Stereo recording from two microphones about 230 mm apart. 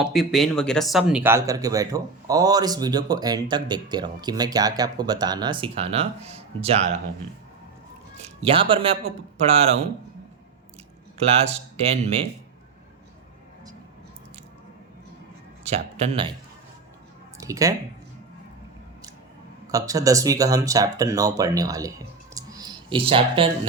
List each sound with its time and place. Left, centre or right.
0.0 s speech: centre; by 6.9 s right
8.2 s a man's voice: right
11.3 s speech: right
15.6 s a man's voice: right
17.4 s speech: centre
19.6 s speech: centre